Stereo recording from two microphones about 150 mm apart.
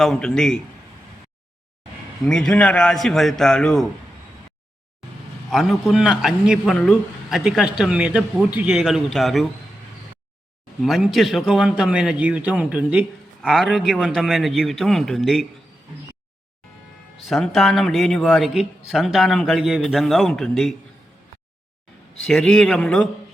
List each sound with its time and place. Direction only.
0.0 s a man's voice: 5° left (ahead or behind)
2.2 s a man's voice: 5° left (ahead or behind)
5.0 s vehicle: centre (ahead or behind)
5.5 s a man's voice: centre (ahead or behind)
10.8 s a man's voice: centre (ahead or behind)
17.2 s a man's voice: centre (ahead or behind)
22.3 s a man's voice: 5° left (ahead or behind)